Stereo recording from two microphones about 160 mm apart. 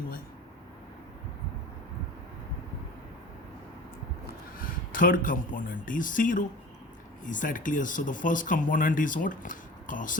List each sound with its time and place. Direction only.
4.5 s speech: 60° left (ahead or behind)